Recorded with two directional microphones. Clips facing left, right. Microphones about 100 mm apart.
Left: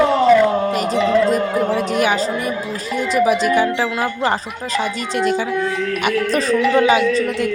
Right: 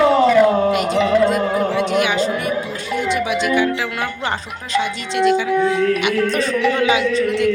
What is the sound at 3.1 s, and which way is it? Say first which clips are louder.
Speech: left 5 dB; 40° left (ahead or behind).